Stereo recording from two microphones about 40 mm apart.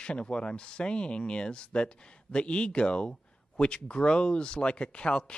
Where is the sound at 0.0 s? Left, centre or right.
Left.